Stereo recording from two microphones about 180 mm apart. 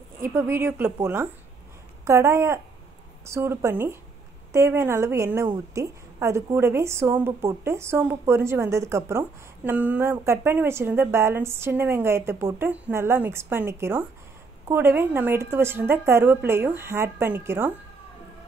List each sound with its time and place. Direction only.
0.2 s a woman's voice: 15° right (ahead or behind)